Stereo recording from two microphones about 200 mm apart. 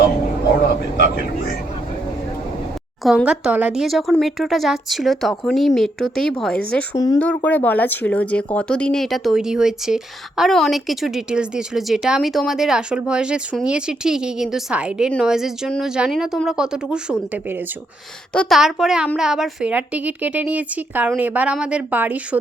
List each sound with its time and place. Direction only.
3.0 s speech: centre (ahead or behind)
6.9 s speech: 20° left (ahead or behind)
7.2 s speech: 5° left (ahead or behind); by 22.4 s 10° right (ahead or behind)